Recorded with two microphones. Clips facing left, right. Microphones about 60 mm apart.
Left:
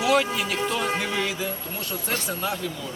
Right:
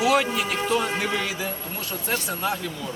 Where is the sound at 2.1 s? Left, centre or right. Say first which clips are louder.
Right 2 dB; centre.